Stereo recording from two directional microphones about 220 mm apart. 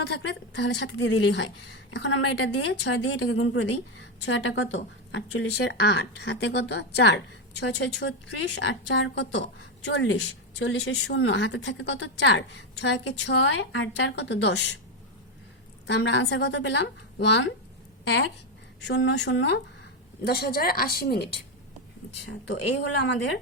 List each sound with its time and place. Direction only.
0.1 s a woman's voice: 50° left (ahead or behind)
15.9 s speech: 55° left (ahead or behind)
18.8 s speech: 55° left (ahead or behind)
22.4 s speech: 55° left (ahead or behind)